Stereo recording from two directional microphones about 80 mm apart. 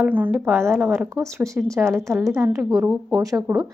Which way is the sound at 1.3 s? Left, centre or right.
Right.